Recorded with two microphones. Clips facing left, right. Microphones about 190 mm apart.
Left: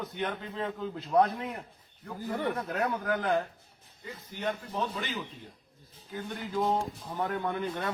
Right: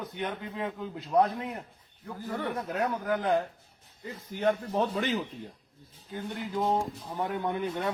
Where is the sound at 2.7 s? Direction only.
15° right (ahead or behind).